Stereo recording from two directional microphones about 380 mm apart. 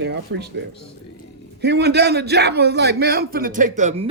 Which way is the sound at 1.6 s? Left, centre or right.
Right.